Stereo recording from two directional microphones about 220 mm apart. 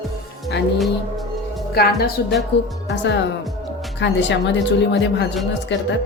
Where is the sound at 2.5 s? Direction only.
50° left (ahead or behind).